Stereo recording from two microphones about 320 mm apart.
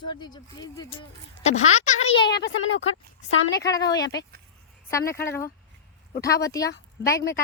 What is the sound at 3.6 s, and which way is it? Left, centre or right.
Speech, centre.